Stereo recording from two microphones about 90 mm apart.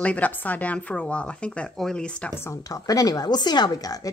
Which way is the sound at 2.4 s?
35° left (ahead or behind).